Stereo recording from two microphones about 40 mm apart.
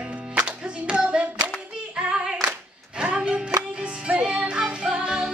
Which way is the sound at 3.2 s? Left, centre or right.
Right.